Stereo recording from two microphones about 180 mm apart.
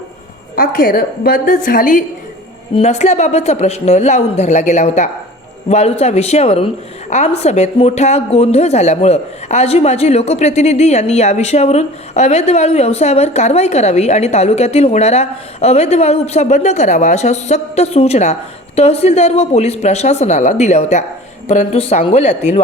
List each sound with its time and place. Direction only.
0.5 s a woman's voice: 55° left (ahead or behind)
2.7 s a woman's voice: 40° left (ahead or behind)